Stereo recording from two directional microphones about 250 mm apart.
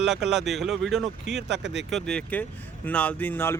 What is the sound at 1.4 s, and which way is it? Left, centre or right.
Speech, right.